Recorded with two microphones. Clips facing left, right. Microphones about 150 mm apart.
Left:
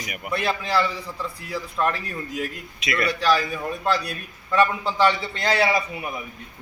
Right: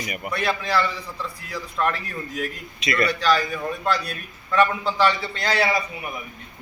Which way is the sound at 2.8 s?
Centre (ahead or behind).